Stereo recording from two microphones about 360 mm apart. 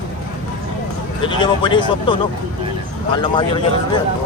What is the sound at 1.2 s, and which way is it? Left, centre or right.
Speech, centre.